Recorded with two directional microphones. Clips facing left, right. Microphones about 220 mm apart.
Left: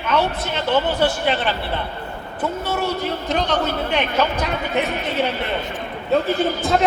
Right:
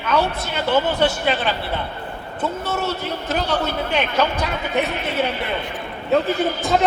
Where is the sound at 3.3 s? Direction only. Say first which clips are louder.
Even; 5° right (ahead or behind).